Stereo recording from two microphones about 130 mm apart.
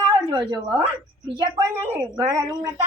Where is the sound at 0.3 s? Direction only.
35° right (ahead or behind).